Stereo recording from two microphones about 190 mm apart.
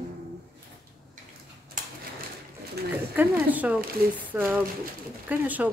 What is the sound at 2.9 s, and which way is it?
Speech, 10° right (ahead or behind).